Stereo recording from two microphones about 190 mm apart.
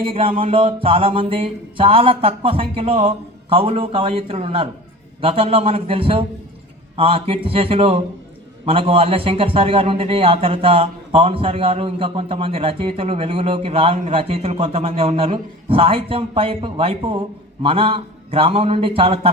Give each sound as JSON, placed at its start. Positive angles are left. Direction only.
{"t": 0.0, "sound": "a man's voice", "side_deg": -30}